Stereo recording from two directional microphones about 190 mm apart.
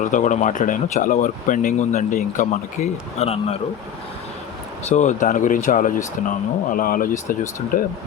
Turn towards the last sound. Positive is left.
turn(degrees=45)  # may be behind; listen again after turning